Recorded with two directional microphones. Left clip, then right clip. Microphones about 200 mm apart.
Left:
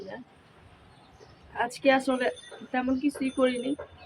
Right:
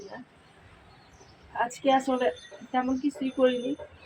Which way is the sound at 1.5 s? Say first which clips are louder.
Even; centre (ahead or behind).